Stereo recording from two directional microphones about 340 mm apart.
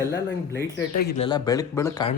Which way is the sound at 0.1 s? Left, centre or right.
Centre.